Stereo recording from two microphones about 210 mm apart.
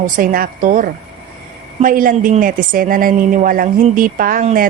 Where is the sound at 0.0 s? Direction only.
40° right (ahead or behind).